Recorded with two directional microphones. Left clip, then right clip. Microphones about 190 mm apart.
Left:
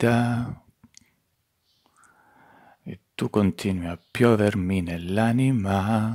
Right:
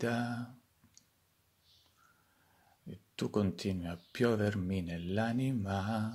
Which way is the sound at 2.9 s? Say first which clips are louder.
Left 9 dB; 30° left (ahead or behind).